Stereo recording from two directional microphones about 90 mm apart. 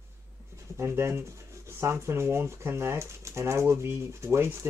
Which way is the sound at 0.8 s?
30° right (ahead or behind).